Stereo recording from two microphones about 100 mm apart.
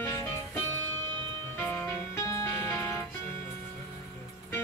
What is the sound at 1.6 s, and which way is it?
Music, 20° left (ahead or behind).